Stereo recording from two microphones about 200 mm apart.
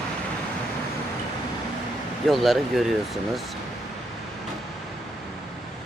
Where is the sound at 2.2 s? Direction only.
Centre (ahead or behind).